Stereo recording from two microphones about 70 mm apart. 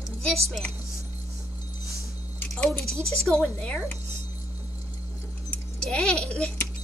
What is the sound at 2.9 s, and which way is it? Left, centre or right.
Speech, centre.